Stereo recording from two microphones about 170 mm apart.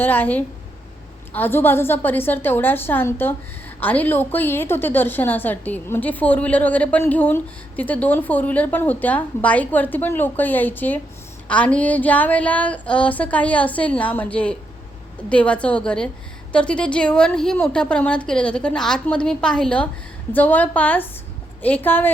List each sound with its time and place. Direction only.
0.0 s a woman's voice: 10° left (ahead or behind)